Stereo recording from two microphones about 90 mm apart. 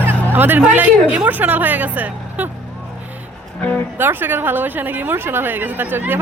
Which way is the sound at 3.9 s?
25° right (ahead or behind).